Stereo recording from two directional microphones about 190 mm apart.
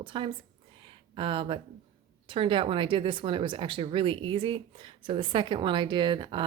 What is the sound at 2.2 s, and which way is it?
Speech, 25° right (ahead or behind).